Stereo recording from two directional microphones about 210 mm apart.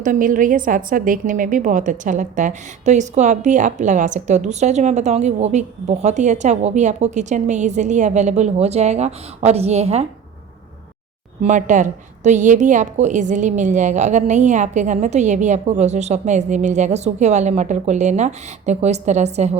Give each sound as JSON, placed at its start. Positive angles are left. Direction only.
{"t": 0.0, "sound": "a woman's voice", "side_deg": -40}
{"t": 11.4, "sound": "a woman's voice", "side_deg": -35}